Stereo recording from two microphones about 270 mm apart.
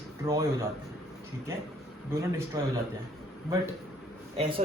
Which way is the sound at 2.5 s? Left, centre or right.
Centre.